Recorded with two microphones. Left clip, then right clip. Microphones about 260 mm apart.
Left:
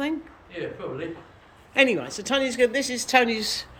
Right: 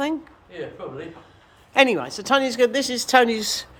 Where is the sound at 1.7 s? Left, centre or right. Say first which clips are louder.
Right 3 dB; centre.